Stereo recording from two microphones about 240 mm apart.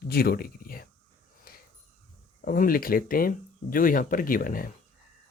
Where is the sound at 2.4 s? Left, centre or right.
Left.